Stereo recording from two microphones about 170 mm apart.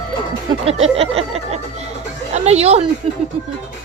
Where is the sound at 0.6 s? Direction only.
35° right (ahead or behind).